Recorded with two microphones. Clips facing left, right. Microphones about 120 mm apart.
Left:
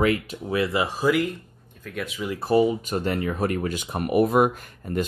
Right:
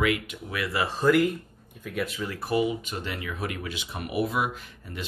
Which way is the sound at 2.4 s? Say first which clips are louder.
Left 6 dB; 35° left (ahead or behind).